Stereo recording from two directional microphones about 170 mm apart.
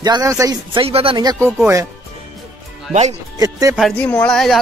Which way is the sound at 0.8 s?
35° right (ahead or behind).